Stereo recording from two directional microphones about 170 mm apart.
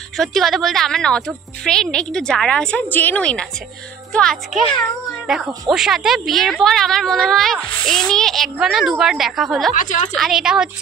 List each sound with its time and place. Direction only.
0.2 s a woman's voice: centre (ahead or behind)
9.8 s a woman's voice: 45° left (ahead or behind)
10.1 s a woman's voice: centre (ahead or behind)